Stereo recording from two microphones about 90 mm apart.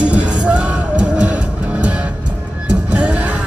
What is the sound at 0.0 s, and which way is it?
Music, 15° right (ahead or behind).